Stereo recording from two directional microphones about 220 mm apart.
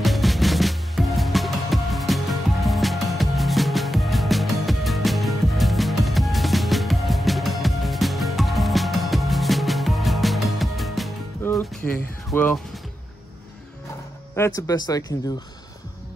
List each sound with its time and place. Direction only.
0.0 s music: centre (ahead or behind)
14.3 s speech: 15° left (ahead or behind)